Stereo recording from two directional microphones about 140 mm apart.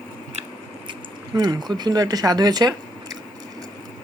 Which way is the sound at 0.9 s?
30° right (ahead or behind).